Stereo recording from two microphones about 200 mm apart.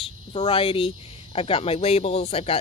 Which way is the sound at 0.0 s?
25° left (ahead or behind).